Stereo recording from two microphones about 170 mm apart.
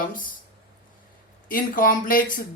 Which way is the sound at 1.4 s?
55° left (ahead or behind).